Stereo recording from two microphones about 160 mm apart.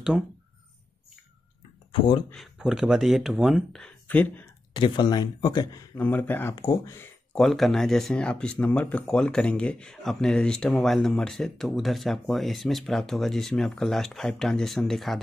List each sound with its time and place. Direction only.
1.9 s speech: 30° left (ahead or behind)
2.3 s speech: centre (ahead or behind)
4.7 s speech: 30° left (ahead or behind)
5.9 s speech: 10° left (ahead or behind)
6.5 s speech: 25° left (ahead or behind)
7.3 s speech: centre (ahead or behind)